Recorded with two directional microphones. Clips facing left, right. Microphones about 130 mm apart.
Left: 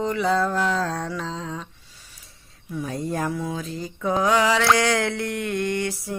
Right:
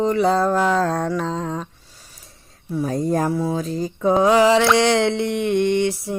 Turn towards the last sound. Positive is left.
turn(degrees=-25)  # may be behind; listen again after turning